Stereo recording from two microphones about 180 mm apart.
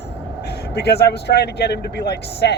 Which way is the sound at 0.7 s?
65° left (ahead or behind).